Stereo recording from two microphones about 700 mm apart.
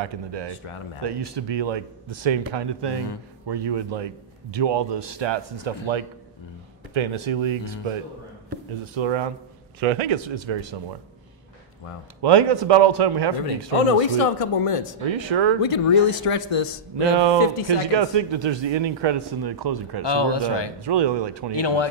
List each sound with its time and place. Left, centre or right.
0.0 s a man's voice: right
12.2 s a man's voice: right
13.8 s speech: left
15.1 s a man's voice: right
15.6 s speech: left
17.1 s a man's voice: right
20.0 s speech: left
20.8 s a man's voice: right
21.5 s speech: left